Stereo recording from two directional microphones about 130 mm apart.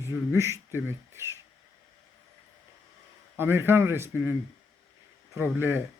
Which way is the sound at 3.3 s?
20° right (ahead or behind).